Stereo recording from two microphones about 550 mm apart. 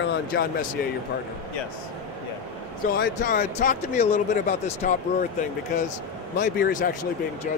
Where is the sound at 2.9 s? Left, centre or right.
Centre.